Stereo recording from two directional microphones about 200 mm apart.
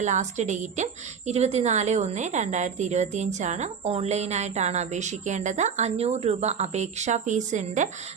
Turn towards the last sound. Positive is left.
turn(degrees=-40)  # may be behind; listen again after turning